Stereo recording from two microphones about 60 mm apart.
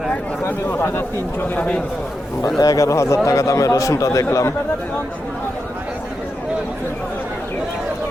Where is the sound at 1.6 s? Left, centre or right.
Centre.